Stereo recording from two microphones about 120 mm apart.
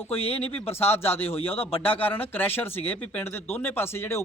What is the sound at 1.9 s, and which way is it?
Speech, 15° left (ahead or behind).